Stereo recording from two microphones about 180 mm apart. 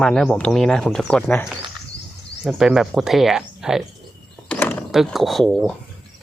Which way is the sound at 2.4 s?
Centre (ahead or behind).